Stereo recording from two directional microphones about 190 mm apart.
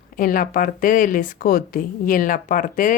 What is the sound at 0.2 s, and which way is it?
A woman's voice, 45° left (ahead or behind).